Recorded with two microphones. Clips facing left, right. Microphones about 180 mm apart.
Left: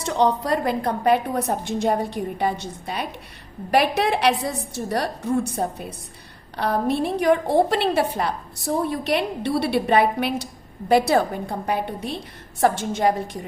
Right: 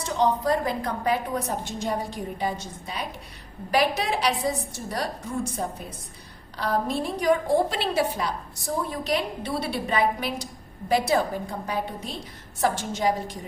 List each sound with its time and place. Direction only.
0.1 s a woman's voice: 70° left (ahead or behind)